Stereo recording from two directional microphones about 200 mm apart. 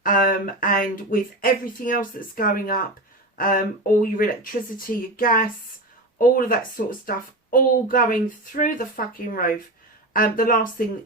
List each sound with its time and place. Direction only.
0.0 s speech: 45° left (ahead or behind)